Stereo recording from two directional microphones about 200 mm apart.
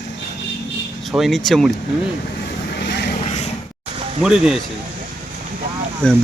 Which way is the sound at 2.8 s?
60° left (ahead or behind).